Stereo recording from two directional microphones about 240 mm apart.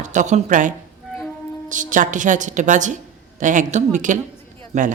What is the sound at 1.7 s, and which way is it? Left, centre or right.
Speech, right.